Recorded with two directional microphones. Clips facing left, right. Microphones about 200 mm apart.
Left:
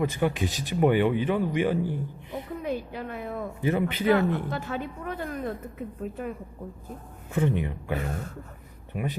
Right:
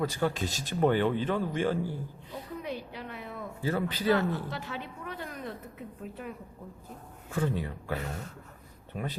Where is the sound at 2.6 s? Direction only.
50° left (ahead or behind).